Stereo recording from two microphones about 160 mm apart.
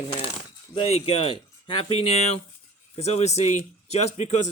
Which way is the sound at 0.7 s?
40° left (ahead or behind).